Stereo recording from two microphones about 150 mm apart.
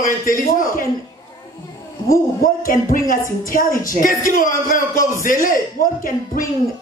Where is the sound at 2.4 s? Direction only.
70° left (ahead or behind).